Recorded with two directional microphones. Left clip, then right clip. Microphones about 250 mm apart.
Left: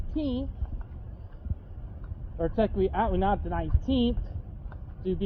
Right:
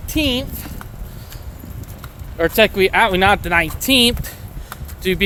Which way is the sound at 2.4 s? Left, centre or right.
Right.